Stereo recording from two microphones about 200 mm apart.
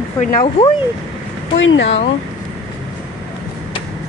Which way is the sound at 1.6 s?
75° left (ahead or behind).